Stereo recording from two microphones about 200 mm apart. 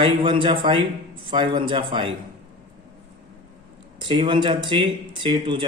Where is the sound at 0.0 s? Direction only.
25° right (ahead or behind).